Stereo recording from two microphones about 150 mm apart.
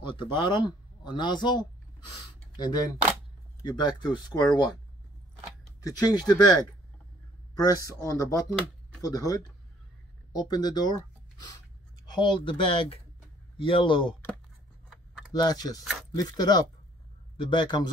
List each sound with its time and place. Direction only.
0.0 s speech: 35° left (ahead or behind)
5.8 s speech: 25° left (ahead or behind)
15.3 s speech: 25° left (ahead or behind)